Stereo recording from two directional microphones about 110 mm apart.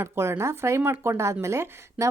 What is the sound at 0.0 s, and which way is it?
A woman's voice, 25° right (ahead or behind).